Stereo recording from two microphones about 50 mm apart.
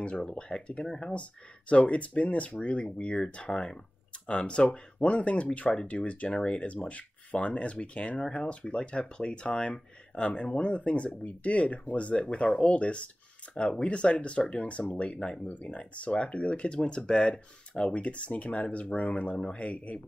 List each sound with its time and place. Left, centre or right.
0.0 s speech: left
1.7 s speech: left